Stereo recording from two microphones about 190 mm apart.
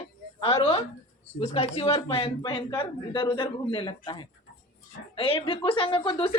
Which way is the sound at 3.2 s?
25° left (ahead or behind).